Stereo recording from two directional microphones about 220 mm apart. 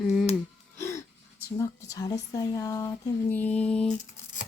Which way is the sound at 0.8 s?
10° left (ahead or behind).